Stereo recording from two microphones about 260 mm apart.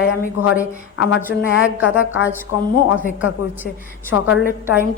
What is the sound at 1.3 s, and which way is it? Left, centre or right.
Speech, centre.